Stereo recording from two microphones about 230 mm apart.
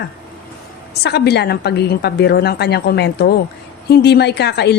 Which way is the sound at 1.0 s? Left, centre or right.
Left.